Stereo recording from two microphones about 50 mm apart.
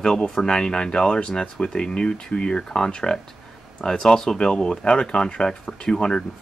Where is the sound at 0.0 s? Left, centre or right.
Centre.